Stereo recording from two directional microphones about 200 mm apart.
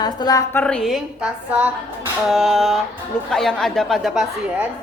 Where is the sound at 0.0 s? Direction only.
20° left (ahead or behind).